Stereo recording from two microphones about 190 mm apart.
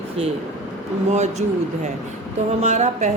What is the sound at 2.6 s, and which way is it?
Speech, 35° right (ahead or behind).